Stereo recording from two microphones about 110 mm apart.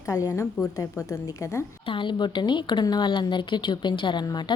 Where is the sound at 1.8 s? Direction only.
50° left (ahead or behind).